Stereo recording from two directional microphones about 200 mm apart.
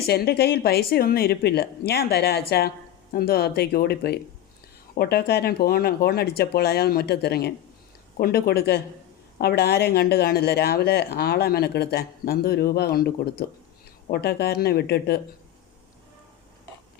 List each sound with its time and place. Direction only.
0.1 s a woman's voice: 55° left (ahead or behind)
14.1 s a woman's voice: 55° left (ahead or behind)